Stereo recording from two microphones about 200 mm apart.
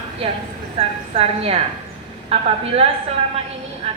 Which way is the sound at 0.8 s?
30° right (ahead or behind).